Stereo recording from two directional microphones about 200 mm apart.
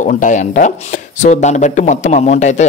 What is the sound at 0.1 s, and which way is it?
Speech, 40° left (ahead or behind).